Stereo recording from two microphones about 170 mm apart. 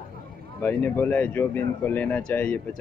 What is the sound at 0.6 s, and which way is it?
Speech, 10° left (ahead or behind).